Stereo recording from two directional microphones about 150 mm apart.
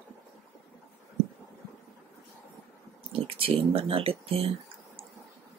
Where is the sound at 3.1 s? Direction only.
40° right (ahead or behind).